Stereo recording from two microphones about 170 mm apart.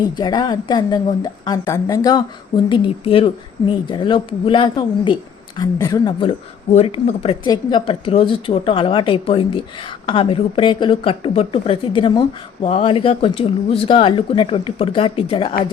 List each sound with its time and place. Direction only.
0.2 s speech: 25° left (ahead or behind)
7.4 s speech: 25° left (ahead or behind)